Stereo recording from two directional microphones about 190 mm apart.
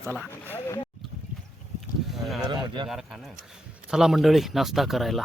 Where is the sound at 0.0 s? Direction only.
10° right (ahead or behind).